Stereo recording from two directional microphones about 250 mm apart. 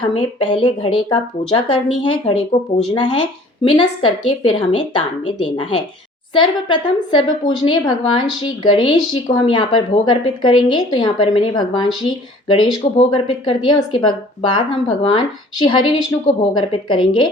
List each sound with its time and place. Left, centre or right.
0.1 s speech: left